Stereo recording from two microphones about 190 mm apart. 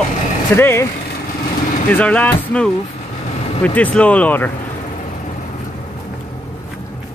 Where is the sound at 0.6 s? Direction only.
10° left (ahead or behind).